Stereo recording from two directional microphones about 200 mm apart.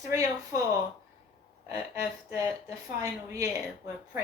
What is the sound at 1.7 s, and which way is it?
A woman's voice, 15° right (ahead or behind).